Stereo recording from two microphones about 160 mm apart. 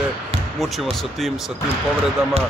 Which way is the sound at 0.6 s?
Centre (ahead or behind).